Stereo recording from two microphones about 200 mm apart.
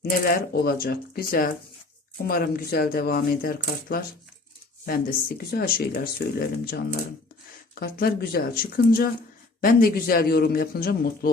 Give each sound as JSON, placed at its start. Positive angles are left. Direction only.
{"t": 0.0, "sound": "a man's voice", "side_deg": 50}